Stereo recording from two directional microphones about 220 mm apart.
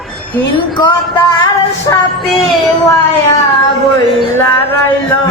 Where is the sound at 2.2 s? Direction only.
Centre (ahead or behind).